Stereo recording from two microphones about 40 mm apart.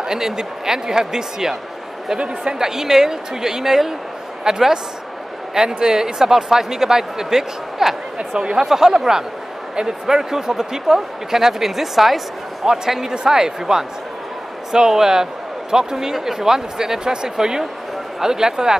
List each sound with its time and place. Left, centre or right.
0.0 s speech: centre
2.1 s a woman's voice: right
2.6 s speech: centre
12.6 s speech: centre